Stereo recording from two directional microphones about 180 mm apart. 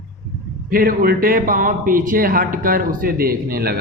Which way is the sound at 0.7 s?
55° right (ahead or behind).